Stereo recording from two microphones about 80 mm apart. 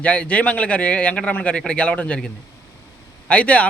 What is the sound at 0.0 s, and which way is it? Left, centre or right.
A man's voice, centre.